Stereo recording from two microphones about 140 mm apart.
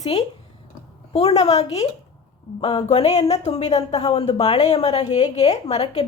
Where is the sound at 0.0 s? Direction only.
50° left (ahead or behind).